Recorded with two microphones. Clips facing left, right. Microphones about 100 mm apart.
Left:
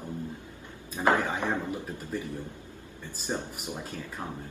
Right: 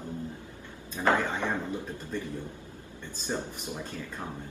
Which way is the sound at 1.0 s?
15° left (ahead or behind).